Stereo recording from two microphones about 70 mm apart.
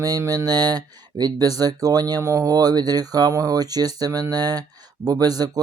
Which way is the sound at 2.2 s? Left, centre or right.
Right.